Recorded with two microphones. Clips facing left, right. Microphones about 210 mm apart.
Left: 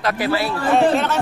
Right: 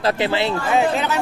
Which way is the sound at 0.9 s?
Centre (ahead or behind).